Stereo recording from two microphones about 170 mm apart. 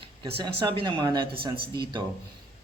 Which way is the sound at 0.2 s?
25° right (ahead or behind).